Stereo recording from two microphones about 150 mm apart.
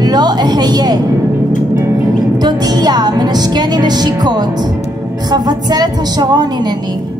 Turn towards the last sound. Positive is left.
turn(degrees=-25)  # may be behind; listen again after turning